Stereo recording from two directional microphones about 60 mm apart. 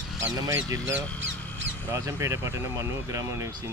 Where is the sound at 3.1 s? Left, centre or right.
Right.